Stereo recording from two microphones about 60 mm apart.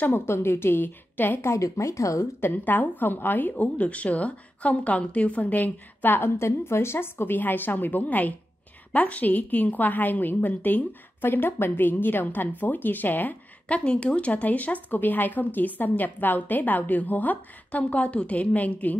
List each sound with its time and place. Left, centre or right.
0.0 s a woman's voice: left
1.4 s speech: left
2.4 s a woman's voice: left